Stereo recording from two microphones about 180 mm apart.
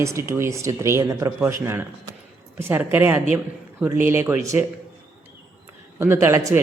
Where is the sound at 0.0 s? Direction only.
15° right (ahead or behind).